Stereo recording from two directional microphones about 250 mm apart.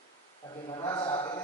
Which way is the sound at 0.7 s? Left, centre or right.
Centre.